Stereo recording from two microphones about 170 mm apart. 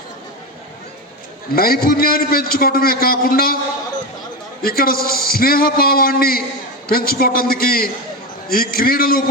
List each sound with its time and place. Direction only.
1.5 s a man's voice: 60° left (ahead or behind)
4.6 s a man's voice: 60° left (ahead or behind)